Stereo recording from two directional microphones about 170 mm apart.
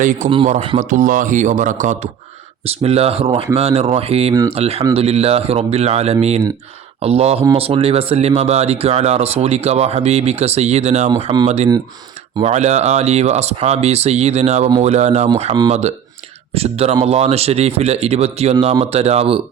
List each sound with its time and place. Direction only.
0.0 s speech: 50° right (ahead or behind)
11.1 s speech: 25° right (ahead or behind)
11.4 s speech: 40° right (ahead or behind)
16.6 s speech: 35° right (ahead or behind)